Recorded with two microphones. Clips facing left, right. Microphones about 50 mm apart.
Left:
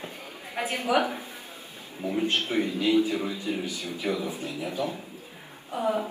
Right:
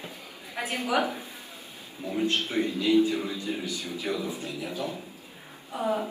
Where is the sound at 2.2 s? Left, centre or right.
Left.